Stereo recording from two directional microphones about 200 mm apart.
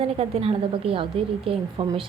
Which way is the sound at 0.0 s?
30° right (ahead or behind).